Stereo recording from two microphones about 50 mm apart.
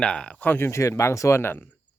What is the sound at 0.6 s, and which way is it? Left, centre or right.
Speech, left.